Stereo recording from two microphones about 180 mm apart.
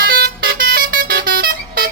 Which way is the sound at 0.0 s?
60° right (ahead or behind).